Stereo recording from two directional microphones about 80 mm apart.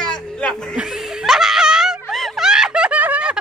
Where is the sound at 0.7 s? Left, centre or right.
Centre.